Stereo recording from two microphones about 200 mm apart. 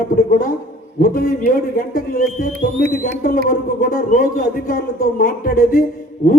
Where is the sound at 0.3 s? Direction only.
45° left (ahead or behind).